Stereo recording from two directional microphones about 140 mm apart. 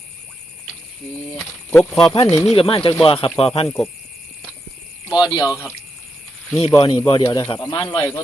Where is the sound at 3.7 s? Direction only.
15° left (ahead or behind).